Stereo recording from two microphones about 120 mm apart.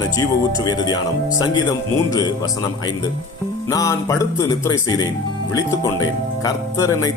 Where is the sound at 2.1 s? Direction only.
35° left (ahead or behind).